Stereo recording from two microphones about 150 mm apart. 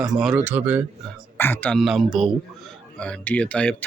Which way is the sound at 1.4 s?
15° left (ahead or behind).